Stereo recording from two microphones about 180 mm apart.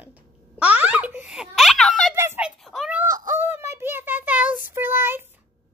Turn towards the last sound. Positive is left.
turn(degrees=-10)  # may be behind; listen again after turning